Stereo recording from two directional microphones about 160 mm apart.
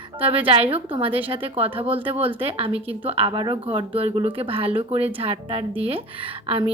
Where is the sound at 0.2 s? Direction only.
35° right (ahead or behind).